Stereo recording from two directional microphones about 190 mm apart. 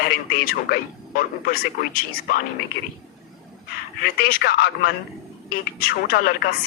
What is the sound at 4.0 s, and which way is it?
A woman's voice, 50° left (ahead or behind).